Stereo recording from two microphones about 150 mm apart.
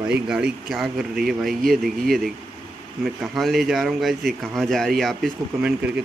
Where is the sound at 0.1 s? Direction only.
5° right (ahead or behind).